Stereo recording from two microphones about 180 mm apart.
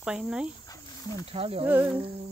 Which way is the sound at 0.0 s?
5° right (ahead or behind).